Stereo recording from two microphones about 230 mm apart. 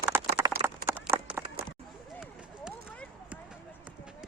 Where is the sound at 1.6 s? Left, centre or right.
Right.